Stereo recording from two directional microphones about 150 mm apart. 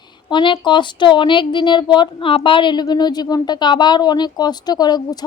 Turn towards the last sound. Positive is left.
turn(degrees=25)  # may be behind; listen again after turning